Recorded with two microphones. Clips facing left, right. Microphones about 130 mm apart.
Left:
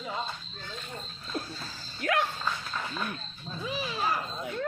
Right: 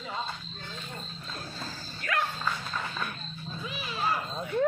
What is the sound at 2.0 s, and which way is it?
Dog, 60° left (ahead or behind).